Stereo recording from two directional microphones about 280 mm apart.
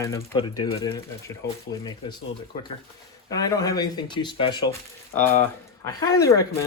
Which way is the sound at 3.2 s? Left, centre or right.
Centre.